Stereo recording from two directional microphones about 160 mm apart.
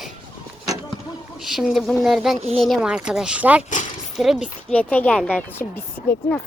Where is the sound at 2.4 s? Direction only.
40° right (ahead or behind).